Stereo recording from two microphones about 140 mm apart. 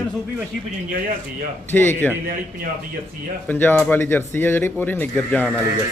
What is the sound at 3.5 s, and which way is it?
Speech, 15° left (ahead or behind).